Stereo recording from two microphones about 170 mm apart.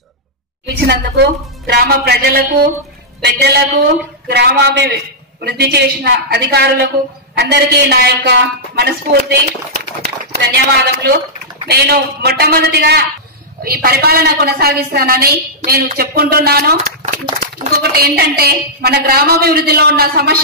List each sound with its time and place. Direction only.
0.7 s a woman's voice: 70° right (ahead or behind)
3.2 s a woman's voice: 80° right
9.0 s speech: 55° right (ahead or behind)
10.0 s a woman's voice: 70° right (ahead or behind)
16.7 s speech: 50° right (ahead or behind)